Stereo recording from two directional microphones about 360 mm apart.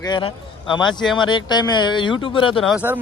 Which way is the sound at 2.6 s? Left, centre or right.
Centre.